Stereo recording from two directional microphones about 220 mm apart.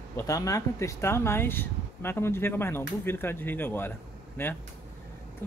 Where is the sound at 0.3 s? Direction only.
15° left (ahead or behind).